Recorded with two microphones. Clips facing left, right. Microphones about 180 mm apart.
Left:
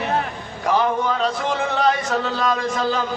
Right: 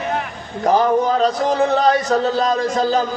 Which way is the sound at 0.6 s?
40° right (ahead or behind).